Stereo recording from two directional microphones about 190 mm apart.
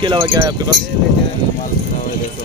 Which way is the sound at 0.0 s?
25° right (ahead or behind).